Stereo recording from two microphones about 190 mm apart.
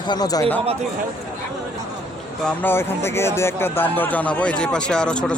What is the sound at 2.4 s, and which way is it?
Speech, 10° left (ahead or behind).